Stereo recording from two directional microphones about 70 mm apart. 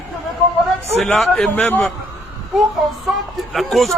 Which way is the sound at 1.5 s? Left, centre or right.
Left.